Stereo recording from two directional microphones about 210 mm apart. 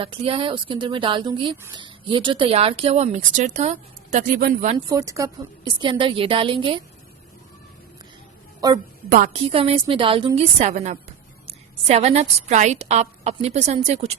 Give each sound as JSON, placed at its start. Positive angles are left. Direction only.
{"t": 0.0, "sound": "a woman's voice", "side_deg": -25}
{"t": 4.9, "sound": "a woman's voice", "side_deg": -15}
{"t": 9.0, "sound": "a woman's voice", "side_deg": -40}